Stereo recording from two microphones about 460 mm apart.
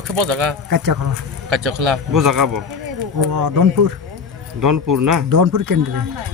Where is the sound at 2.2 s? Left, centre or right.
Right.